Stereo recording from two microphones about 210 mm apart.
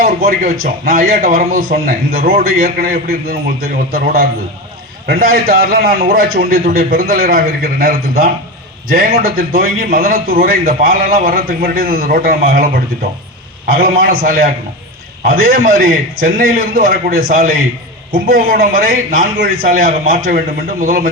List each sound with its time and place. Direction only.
0.0 s a man's voice: 45° right (ahead or behind)